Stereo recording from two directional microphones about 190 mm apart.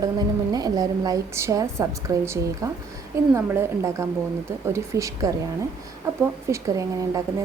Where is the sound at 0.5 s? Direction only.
20° right (ahead or behind).